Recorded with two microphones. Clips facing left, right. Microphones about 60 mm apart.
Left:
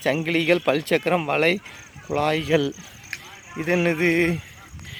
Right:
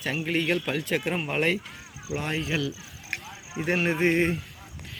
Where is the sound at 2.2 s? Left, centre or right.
Left.